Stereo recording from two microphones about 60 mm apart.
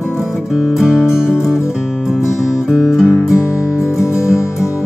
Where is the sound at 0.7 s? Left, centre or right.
Centre.